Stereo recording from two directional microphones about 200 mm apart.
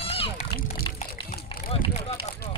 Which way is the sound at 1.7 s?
30° left (ahead or behind).